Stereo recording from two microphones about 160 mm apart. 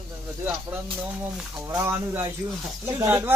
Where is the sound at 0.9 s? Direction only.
10° right (ahead or behind).